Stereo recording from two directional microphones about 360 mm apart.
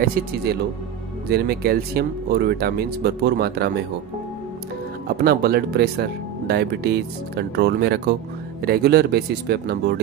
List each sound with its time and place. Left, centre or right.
1.3 s speech: right
5.0 s speech: right